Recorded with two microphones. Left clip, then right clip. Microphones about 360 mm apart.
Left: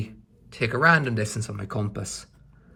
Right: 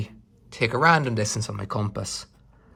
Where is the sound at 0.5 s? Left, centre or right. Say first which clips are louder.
Right 1 dB; centre.